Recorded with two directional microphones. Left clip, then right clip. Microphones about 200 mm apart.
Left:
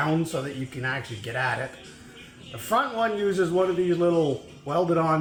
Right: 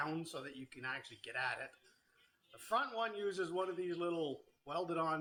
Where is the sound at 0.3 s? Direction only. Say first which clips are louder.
Left 17 dB; 20° right (ahead or behind).